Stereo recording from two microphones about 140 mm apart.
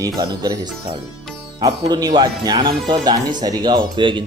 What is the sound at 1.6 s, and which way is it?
Speech, 25° right (ahead or behind).